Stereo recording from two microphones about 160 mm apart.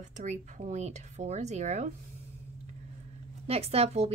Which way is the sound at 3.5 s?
40° right (ahead or behind).